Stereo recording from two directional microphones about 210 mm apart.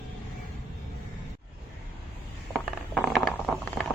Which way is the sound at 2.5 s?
Centre (ahead or behind).